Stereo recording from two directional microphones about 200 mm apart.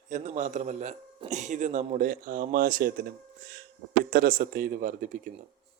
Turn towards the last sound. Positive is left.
turn(degrees=-40)  # may be behind; listen again after turning